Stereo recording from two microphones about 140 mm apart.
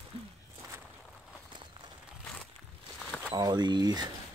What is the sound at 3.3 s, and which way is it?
Speech, 30° right (ahead or behind).